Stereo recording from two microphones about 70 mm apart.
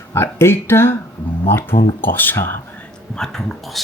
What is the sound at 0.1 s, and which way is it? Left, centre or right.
Speech, left.